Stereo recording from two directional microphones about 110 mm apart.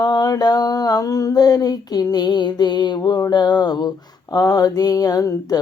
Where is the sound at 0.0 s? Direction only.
40° left (ahead or behind).